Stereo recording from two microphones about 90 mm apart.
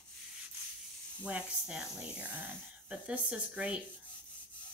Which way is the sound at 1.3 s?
10° right (ahead or behind).